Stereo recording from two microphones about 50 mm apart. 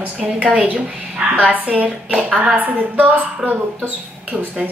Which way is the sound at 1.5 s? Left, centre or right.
Right.